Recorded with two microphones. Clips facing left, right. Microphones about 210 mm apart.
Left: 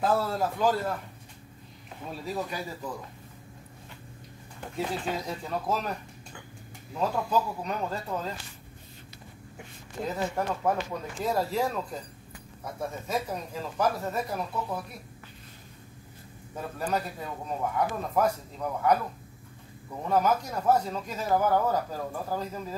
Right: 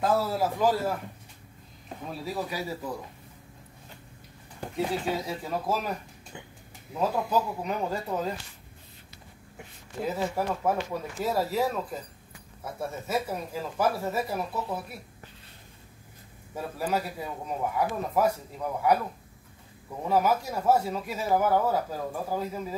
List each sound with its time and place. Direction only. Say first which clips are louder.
0.0 s speech: right 1 dB; 5° right (ahead or behind)
4.7 s speech: right 2 dB; 5° right (ahead or behind)
6.9 s speech: right 1 dB; 15° right (ahead or behind)
9.6 s speech: right 1 dB; 5° right (ahead or behind)
16.5 s speech: right 1 dB; 5° right (ahead or behind)
20.1 s speech: right 1 dB; 5° right (ahead or behind)